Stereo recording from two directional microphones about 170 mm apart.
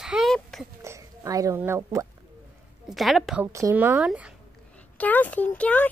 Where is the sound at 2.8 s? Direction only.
Centre (ahead or behind).